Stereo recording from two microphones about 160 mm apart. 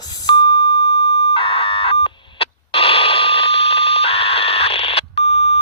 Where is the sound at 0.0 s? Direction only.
25° left (ahead or behind).